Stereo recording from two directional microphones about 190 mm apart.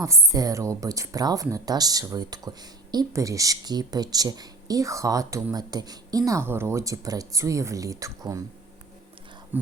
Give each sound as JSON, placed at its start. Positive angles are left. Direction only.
{"t": 0.0, "sound": "speech", "side_deg": -15}